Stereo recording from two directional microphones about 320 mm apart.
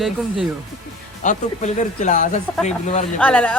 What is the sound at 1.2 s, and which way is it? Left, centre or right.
A man's voice, left.